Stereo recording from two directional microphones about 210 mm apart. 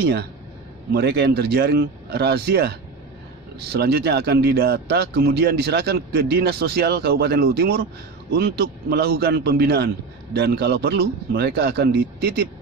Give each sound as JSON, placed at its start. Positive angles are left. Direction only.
{"t": 0.0, "sound": "speech", "side_deg": -50}